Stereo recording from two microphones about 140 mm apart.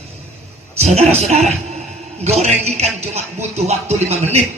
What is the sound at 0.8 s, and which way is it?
A man's voice, 50° right (ahead or behind).